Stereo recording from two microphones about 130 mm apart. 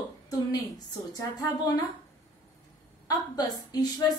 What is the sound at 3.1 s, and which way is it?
A woman's voice, 30° left (ahead or behind).